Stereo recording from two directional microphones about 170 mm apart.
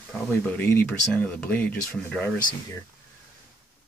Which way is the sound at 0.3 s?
10° left (ahead or behind).